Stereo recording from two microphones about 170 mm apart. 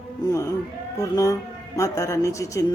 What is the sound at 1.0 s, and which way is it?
Speech, 20° left (ahead or behind).